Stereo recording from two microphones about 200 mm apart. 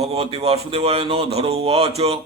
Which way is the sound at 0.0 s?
30° right (ahead or behind).